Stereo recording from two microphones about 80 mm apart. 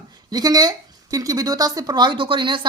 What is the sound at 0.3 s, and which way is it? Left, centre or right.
Speech, right.